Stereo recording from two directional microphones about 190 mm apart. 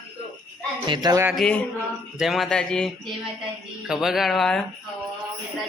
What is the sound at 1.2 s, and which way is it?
A man's voice, centre (ahead or behind).